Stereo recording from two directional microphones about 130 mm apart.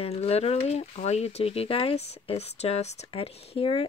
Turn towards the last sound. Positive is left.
turn(degrees=45)  # may be behind; listen again after turning